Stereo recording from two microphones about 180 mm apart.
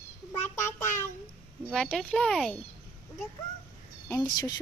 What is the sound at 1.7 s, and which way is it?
Speech, 5° left (ahead or behind).